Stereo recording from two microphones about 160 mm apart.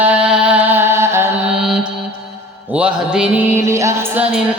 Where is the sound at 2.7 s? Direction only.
5° right (ahead or behind).